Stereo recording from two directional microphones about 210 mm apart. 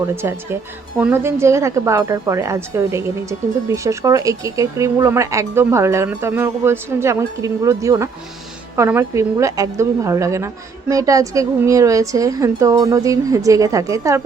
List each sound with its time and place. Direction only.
0.2 s a woman's voice: 10° right (ahead or behind)